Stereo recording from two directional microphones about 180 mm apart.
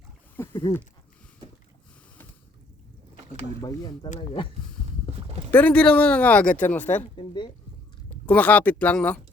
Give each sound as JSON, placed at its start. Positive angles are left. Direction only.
{"t": 0.3, "sound": "speech", "side_deg": 20}
{"t": 3.6, "sound": "speech", "side_deg": 20}
{"t": 5.5, "sound": "speech", "side_deg": 10}
{"t": 7.2, "sound": "speech", "side_deg": 25}
{"t": 8.3, "sound": "speech", "side_deg": 10}